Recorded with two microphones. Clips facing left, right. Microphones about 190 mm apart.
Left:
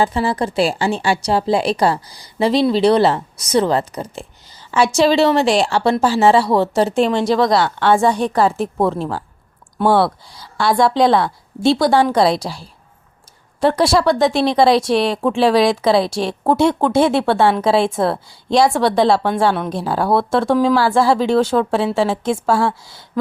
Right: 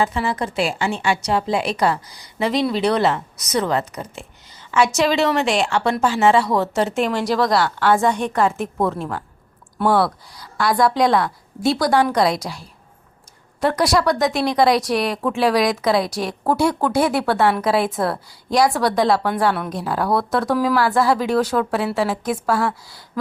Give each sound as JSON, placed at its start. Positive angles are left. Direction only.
{"t": 0.0, "sound": "a woman's voice", "side_deg": 35}